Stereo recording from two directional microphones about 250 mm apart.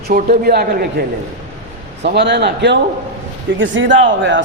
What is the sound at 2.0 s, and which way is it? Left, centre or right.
A man's voice, right.